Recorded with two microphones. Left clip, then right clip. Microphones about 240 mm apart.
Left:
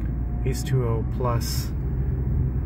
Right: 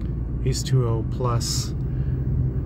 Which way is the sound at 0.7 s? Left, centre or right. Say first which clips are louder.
Left 1 dB; centre.